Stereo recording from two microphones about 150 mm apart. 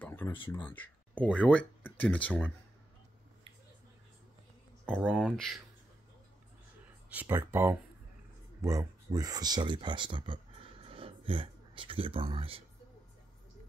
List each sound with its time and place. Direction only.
0.0 s a sound: 15° left (ahead or behind)
0.5 s speech: 10° left (ahead or behind)
5.0 s speech: centre (ahead or behind)
7.3 s speech: 15° right (ahead or behind); by 12.6 s 40° right (ahead or behind)